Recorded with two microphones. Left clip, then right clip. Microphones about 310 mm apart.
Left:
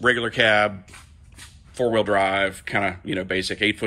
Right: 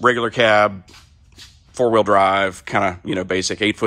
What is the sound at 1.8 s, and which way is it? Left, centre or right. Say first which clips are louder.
Speech: right 5 dB; right.